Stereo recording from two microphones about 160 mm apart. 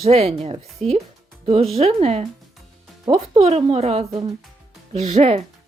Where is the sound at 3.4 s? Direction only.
40° right (ahead or behind).